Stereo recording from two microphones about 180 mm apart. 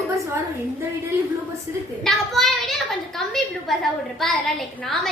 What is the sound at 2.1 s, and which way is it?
A child's voice, centre (ahead or behind).